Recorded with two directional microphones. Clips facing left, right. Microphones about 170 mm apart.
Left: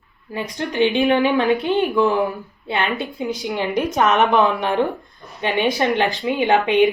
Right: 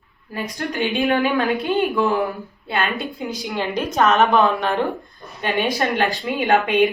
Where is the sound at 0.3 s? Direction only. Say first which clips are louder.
Left 4 dB; 25° left (ahead or behind).